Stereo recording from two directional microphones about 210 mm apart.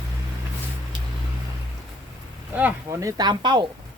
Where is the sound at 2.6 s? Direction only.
10° right (ahead or behind).